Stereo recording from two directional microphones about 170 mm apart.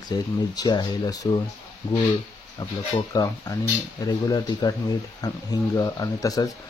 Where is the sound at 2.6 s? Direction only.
25° left (ahead or behind).